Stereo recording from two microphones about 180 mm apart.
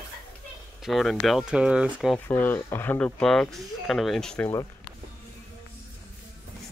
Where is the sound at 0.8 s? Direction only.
Centre (ahead or behind).